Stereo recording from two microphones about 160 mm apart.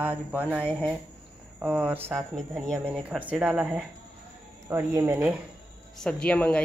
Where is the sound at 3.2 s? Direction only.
10° right (ahead or behind).